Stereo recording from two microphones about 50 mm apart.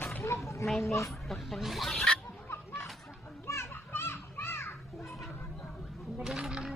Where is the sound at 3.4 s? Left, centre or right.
Left.